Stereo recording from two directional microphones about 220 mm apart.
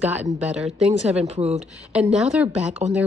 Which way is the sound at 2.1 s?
5° right (ahead or behind).